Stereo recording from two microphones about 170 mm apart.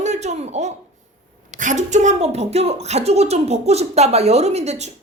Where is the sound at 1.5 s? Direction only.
50° right (ahead or behind).